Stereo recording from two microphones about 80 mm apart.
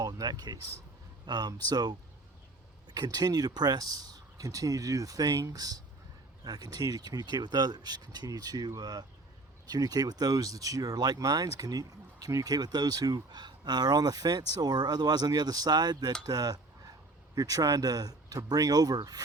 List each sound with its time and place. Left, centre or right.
0.0 s speech: right